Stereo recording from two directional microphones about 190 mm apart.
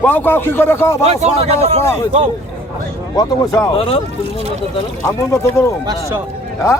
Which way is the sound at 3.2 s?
20° left (ahead or behind).